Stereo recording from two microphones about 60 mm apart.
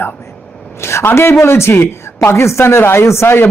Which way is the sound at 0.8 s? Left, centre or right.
Left.